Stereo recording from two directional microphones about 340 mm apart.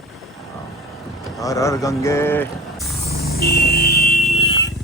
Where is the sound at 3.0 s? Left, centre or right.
Left.